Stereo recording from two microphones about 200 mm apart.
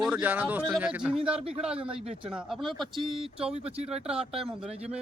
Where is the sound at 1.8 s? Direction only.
30° right (ahead or behind).